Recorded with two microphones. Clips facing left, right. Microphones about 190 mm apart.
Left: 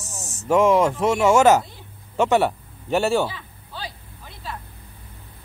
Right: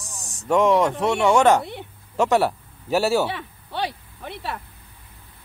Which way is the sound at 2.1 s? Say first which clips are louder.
Left 1 dB; centre (ahead or behind).